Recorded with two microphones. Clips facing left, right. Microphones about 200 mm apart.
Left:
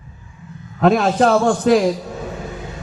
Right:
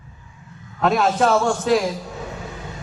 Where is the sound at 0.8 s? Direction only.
55° left (ahead or behind).